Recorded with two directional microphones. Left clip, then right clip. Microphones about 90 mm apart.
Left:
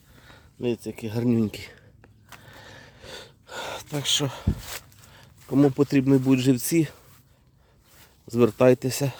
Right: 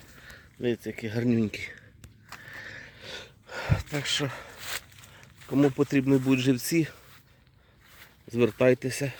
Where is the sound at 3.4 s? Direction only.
10° left (ahead or behind).